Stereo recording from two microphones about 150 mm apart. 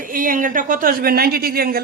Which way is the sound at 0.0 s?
65° right (ahead or behind).